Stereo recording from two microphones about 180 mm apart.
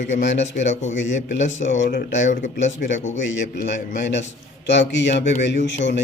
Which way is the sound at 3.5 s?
45° left (ahead or behind).